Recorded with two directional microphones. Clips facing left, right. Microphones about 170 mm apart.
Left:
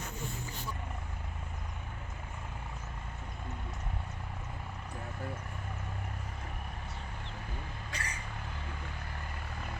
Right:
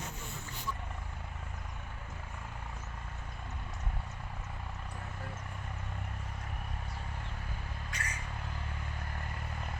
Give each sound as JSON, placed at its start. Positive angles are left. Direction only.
{"t": 7.9, "sound": "vehicle", "side_deg": 30}